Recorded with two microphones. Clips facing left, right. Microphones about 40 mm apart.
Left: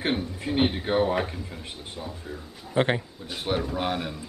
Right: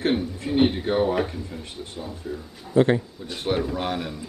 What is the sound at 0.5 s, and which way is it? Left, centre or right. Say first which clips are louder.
Speech: right 3 dB; centre.